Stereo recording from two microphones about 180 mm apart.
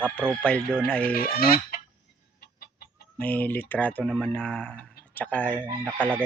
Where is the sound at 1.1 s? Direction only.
55° left (ahead or behind).